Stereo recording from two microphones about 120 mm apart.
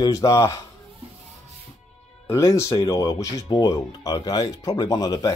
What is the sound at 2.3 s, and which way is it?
Speech, 25° left (ahead or behind).